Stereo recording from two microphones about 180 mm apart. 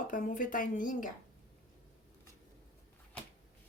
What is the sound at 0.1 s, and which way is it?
A woman's voice, 45° left (ahead or behind).